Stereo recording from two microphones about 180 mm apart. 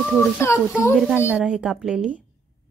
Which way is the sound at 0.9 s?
5° right (ahead or behind).